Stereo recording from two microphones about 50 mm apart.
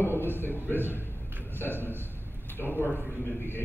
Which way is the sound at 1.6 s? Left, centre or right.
Left.